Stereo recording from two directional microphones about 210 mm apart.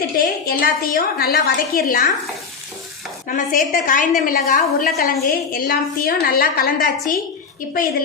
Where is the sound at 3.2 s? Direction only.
40° left (ahead or behind).